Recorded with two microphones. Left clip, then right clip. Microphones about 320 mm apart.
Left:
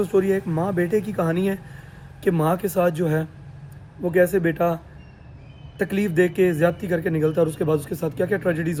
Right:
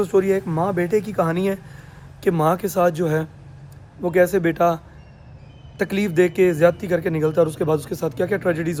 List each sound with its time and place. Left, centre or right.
0.0 s a man's voice: centre
5.8 s a man's voice: centre